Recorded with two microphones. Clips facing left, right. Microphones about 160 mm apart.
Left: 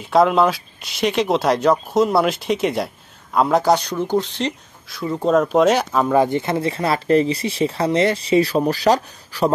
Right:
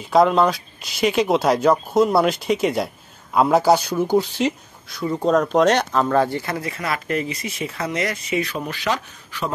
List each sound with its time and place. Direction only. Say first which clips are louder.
0.0 s speech: left 1 dB; centre (ahead or behind); by 9.5 s 35° left (ahead or behind)